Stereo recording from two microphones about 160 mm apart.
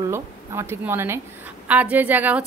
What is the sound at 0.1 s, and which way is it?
A woman's voice, 15° right (ahead or behind).